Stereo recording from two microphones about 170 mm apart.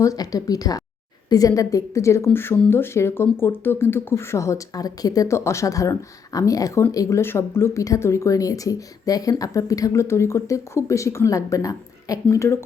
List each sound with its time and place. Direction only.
0.0 s speech: 20° left (ahead or behind)